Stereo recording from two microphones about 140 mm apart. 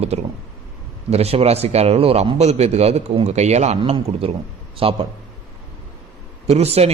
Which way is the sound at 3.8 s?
40° right (ahead or behind).